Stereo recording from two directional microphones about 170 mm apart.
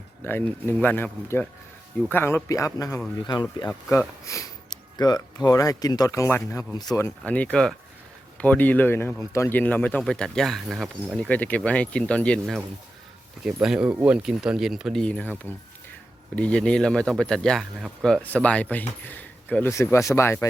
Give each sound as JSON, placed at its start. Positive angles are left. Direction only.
{"t": 0.2, "sound": "speech", "side_deg": 10}
{"t": 3.7, "sound": "speech", "side_deg": 10}
{"t": 4.3, "sound": "speech", "side_deg": 20}
{"t": 13.4, "sound": "speech", "side_deg": -5}